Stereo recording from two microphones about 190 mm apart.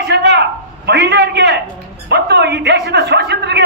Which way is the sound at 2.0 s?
60° right (ahead or behind).